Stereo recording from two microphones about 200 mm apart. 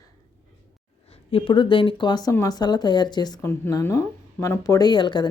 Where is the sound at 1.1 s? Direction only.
30° left (ahead or behind).